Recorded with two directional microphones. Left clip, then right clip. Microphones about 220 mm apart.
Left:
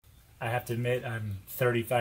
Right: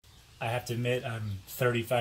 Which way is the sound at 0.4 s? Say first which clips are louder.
Left 1 dB; 20° left (ahead or behind).